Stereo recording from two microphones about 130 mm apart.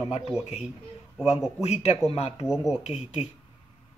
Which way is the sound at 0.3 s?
5° right (ahead or behind).